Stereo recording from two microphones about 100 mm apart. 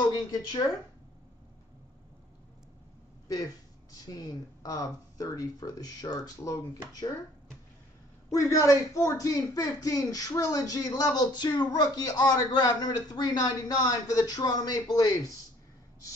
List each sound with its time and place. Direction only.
0.0 s speech: 40° left (ahead or behind)
4.0 s speech: 40° left (ahead or behind)
8.3 s speech: 35° left (ahead or behind)